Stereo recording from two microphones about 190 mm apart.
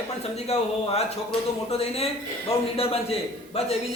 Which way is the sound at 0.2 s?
35° left (ahead or behind).